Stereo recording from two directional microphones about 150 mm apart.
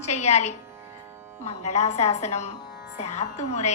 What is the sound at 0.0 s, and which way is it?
A woman's voice, 50° left (ahead or behind).